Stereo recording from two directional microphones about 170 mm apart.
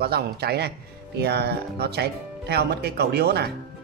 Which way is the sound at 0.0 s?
70° right (ahead or behind).